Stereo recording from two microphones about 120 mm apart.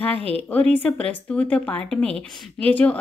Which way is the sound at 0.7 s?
15° left (ahead or behind).